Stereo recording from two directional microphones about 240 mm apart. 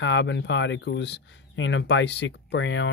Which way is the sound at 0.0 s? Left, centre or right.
Left.